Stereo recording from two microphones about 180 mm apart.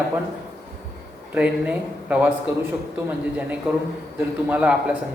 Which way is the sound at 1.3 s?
5° right (ahead or behind).